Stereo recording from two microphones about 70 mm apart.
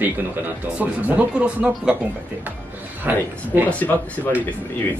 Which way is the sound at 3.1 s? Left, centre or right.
Right.